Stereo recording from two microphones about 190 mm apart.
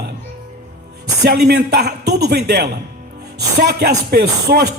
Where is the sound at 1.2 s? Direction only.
60° right (ahead or behind).